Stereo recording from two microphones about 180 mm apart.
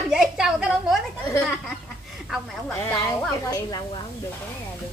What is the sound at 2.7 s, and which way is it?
Speech, 10° left (ahead or behind).